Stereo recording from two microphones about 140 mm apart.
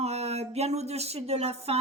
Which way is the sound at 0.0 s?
50° right (ahead or behind).